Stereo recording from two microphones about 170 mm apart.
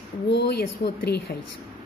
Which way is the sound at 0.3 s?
75° left (ahead or behind).